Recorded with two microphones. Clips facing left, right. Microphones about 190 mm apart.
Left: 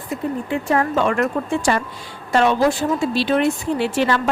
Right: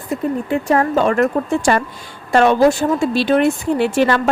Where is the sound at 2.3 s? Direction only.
50° right (ahead or behind).